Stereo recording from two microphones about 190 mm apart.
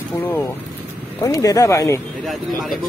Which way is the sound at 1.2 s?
15° left (ahead or behind).